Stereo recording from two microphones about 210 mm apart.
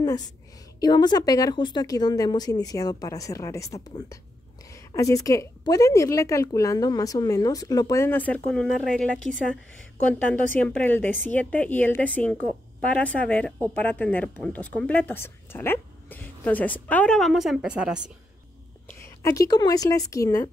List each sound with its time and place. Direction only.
0.7 s a woman's voice: 20° left (ahead or behind); by 9.1 s 5° left (ahead or behind)
10.1 s a woman's voice: 10° left (ahead or behind)
18.9 s a woman's voice: 15° left (ahead or behind)